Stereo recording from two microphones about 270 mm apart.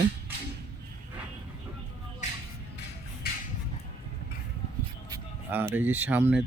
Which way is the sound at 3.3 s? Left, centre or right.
Left.